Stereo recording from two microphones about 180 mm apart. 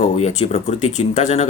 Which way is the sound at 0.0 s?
40° left (ahead or behind).